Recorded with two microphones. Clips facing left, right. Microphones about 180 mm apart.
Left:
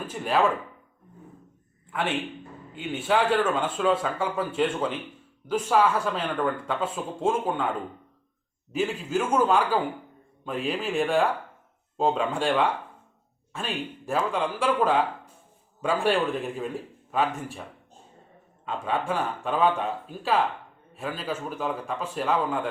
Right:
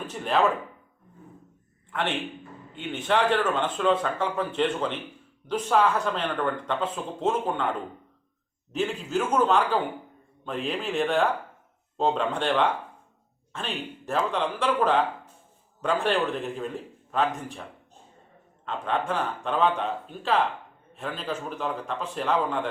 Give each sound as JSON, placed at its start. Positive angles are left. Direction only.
{"t": 0.1, "sound": "speech", "side_deg": 5}
{"t": 1.9, "sound": "a man's voice", "side_deg": 5}